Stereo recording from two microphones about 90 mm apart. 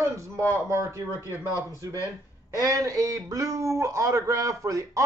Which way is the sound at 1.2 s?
35° left (ahead or behind).